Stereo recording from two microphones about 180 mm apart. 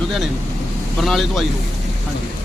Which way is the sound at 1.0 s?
Centre (ahead or behind).